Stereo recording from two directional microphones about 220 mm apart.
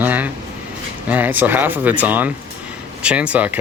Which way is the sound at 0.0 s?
5° right (ahead or behind).